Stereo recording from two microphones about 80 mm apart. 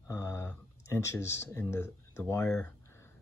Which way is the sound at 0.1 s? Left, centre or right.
Left.